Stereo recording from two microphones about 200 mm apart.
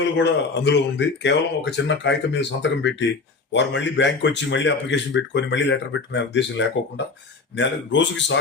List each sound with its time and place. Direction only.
0.2 s speech: 60° left (ahead or behind)